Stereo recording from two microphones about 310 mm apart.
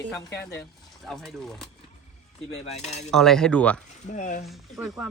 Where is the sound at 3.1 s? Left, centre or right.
Centre.